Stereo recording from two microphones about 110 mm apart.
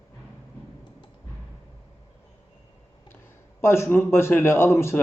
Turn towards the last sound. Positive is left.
turn(degrees=25)  # may be behind; listen again after turning